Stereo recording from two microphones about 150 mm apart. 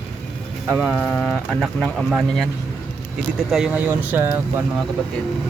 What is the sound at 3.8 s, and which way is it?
Speech, 15° right (ahead or behind).